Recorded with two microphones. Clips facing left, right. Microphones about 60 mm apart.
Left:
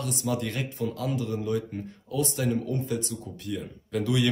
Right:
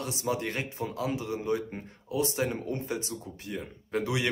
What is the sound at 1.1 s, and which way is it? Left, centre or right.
A man's voice, centre.